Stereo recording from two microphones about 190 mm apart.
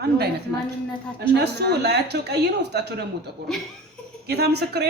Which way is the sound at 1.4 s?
60° right (ahead or behind).